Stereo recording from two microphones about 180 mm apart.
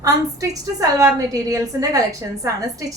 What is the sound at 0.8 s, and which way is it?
A woman's voice, 20° right (ahead or behind).